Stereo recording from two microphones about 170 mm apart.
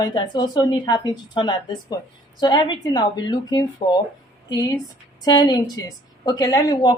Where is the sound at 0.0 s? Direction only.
25° left (ahead or behind).